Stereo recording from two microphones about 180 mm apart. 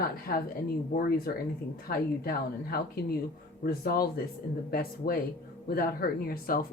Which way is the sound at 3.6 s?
55° left (ahead or behind).